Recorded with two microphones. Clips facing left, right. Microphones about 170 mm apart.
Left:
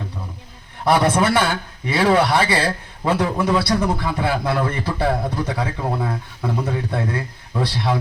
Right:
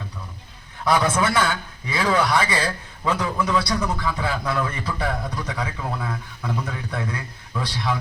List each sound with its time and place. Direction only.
0.9 s a man's voice: 30° left (ahead or behind)